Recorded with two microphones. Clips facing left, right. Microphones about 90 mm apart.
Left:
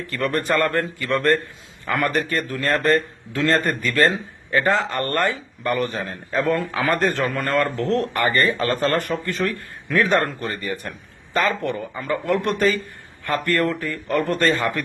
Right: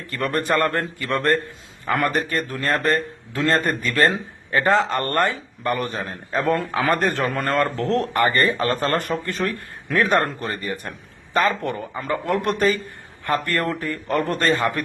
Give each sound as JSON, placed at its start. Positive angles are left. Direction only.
{"t": 0.1, "sound": "speech", "side_deg": -30}
{"t": 2.6, "sound": "a man's voice", "side_deg": -10}
{"t": 6.9, "sound": "speech", "side_deg": -20}
{"t": 7.3, "sound": "a man's voice", "side_deg": -35}